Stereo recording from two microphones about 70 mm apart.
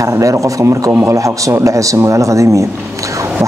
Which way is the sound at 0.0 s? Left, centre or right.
Right.